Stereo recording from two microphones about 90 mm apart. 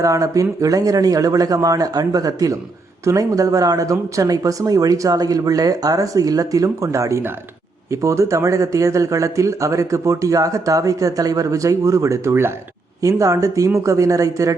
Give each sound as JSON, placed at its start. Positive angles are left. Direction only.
{"t": 0.0, "sound": "speech", "side_deg": -40}
{"t": 13.0, "sound": "speech", "side_deg": -35}